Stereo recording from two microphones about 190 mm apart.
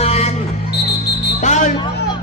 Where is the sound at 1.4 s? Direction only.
40° left (ahead or behind).